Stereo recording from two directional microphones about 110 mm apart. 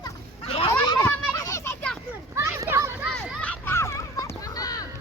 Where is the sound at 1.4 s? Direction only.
25° left (ahead or behind).